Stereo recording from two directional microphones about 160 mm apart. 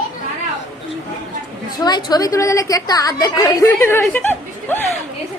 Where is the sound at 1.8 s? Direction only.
25° left (ahead or behind).